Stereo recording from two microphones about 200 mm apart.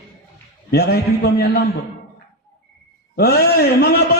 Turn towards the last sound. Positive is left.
turn(degrees=50)  # may be behind; listen again after turning